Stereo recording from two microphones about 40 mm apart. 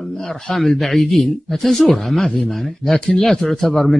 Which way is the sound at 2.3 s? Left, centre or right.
Centre.